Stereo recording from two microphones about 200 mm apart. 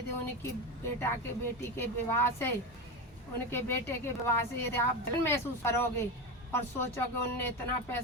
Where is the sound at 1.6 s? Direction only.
10° left (ahead or behind).